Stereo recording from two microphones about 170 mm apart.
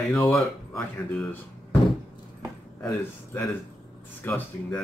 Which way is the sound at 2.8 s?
15° left (ahead or behind).